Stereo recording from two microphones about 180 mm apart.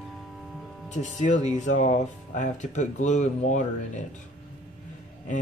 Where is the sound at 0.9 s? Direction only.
40° left (ahead or behind).